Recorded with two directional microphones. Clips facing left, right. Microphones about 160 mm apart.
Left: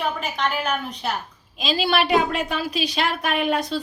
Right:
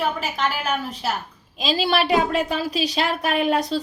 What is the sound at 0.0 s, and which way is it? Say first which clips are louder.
A woman's voice: right 1 dB; 5° right (ahead or behind).